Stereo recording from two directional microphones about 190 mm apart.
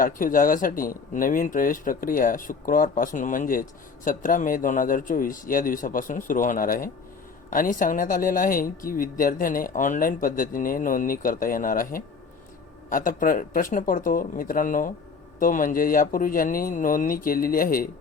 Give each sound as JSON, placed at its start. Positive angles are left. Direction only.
{"t": 0.0, "sound": "speech", "side_deg": 45}